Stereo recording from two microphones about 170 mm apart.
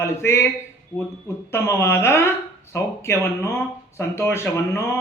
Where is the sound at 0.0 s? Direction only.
15° left (ahead or behind).